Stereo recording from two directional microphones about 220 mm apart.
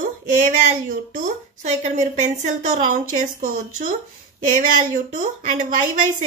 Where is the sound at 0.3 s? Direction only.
35° right (ahead or behind).